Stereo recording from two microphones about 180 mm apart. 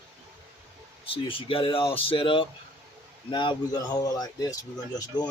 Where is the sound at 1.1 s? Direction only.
30° left (ahead or behind).